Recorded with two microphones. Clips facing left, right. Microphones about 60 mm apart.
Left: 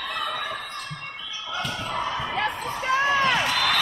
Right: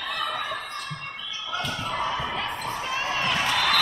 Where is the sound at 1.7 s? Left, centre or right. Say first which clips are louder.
Even; centre.